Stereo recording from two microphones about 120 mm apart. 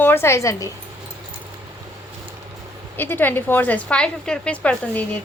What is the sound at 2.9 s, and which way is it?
A woman's voice, 15° left (ahead or behind).